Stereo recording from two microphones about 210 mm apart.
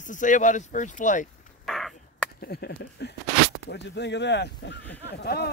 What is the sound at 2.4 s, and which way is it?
Speech, 50° left (ahead or behind).